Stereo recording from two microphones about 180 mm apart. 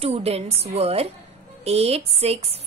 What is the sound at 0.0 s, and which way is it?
Speech, 35° right (ahead or behind).